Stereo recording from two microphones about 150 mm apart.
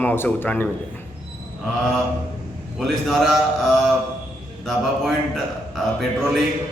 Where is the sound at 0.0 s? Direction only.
15° left (ahead or behind).